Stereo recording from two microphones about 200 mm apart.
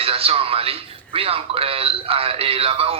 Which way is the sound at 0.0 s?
30° right (ahead or behind).